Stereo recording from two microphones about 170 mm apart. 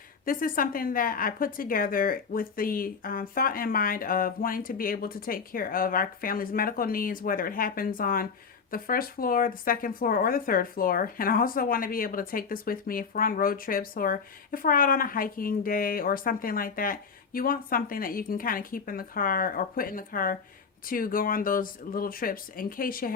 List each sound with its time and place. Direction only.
0.3 s speech: 55° left (ahead or behind)